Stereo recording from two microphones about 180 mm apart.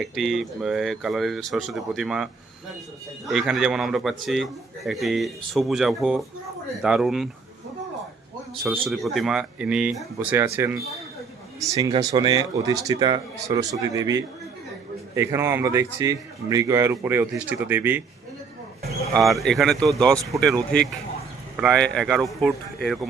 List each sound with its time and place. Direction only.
0.0 s speech: centre (ahead or behind)
8.8 s speech: centre (ahead or behind)
10.3 s speech: 15° right (ahead or behind)
19.1 s speech: centre (ahead or behind)
20.1 s speech: 20° right (ahead or behind)
20.4 s speech: centre (ahead or behind)